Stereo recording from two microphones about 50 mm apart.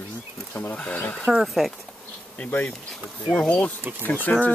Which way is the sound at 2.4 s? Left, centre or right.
Left.